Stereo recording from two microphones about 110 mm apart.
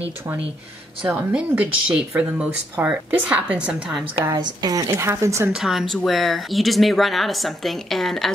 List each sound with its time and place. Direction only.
1.1 s speech: 15° right (ahead or behind)
4.4 s a woman's voice: 40° right (ahead or behind)
5.5 s a woman's voice: 5° right (ahead or behind)